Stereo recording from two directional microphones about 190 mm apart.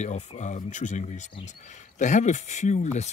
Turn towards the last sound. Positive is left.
turn(degrees=35)  # may be behind; listen again after turning